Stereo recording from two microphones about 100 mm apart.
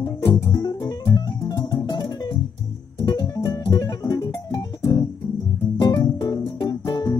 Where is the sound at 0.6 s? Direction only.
40° left (ahead or behind).